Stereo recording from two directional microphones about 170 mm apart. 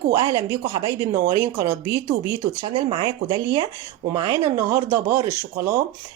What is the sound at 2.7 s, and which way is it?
Speech, 30° right (ahead or behind).